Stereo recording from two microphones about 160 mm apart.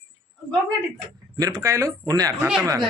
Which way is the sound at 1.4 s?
20° right (ahead or behind).